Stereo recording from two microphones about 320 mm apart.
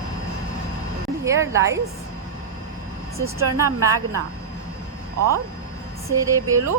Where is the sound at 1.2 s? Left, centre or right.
Centre.